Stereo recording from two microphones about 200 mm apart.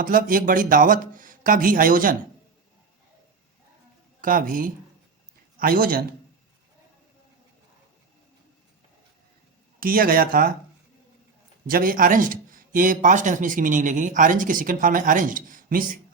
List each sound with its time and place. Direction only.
0.0 s speech: 45° right (ahead or behind)
4.2 s speech: 45° right (ahead or behind)
9.8 s speech: 45° right (ahead or behind)
11.7 s speech: 45° right (ahead or behind)